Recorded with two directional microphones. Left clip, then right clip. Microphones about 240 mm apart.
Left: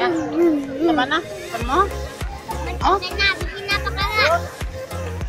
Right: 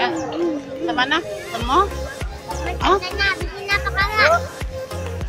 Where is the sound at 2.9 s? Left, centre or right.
Right.